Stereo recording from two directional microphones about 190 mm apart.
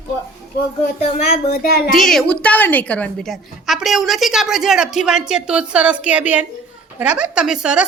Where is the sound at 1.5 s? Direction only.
55° left (ahead or behind).